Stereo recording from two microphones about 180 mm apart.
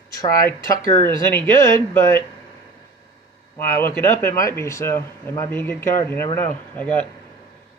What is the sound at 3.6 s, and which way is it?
Speech, 15° left (ahead or behind).